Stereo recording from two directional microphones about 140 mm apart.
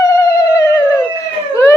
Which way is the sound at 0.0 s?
20° left (ahead or behind).